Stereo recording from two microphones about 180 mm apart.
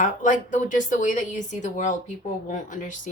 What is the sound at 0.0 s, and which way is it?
Speech, 45° left (ahead or behind).